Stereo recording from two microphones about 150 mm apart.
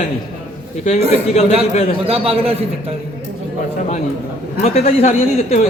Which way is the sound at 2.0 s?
40° right (ahead or behind).